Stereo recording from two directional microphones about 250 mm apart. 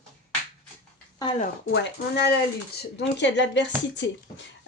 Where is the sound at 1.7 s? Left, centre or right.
Left.